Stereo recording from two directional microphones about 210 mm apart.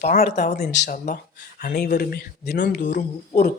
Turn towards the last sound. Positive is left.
turn(degrees=35)  # may be behind; listen again after turning